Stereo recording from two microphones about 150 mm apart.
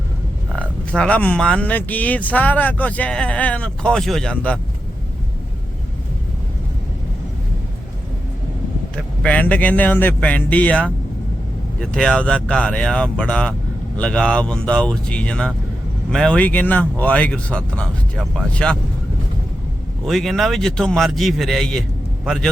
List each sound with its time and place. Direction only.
0.9 s speech: 10° left (ahead or behind)
9.0 s speech: 10° left (ahead or behind)
20.1 s a man's voice: centre (ahead or behind)